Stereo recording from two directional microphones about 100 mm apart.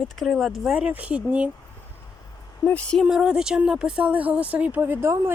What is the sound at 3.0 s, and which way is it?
Speech, 10° right (ahead or behind).